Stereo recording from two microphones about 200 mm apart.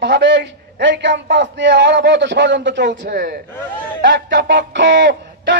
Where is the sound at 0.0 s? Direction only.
60° right (ahead or behind).